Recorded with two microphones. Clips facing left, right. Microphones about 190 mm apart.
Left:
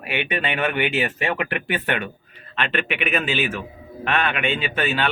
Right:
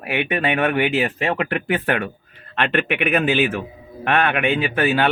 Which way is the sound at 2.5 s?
55° right (ahead or behind).